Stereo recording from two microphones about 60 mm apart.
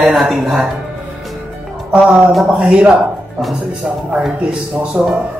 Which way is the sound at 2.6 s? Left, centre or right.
Centre.